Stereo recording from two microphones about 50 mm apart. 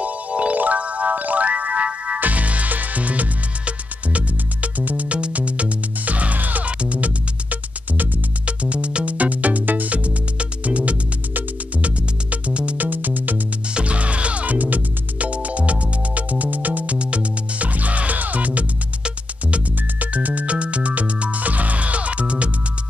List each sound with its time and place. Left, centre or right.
0.0 s music: right
13.7 s music: right